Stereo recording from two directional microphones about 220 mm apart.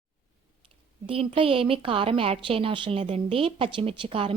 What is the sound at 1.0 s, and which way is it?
Speech, 25° right (ahead or behind).